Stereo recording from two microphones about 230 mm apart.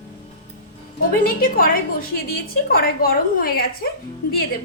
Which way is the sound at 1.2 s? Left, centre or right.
Left.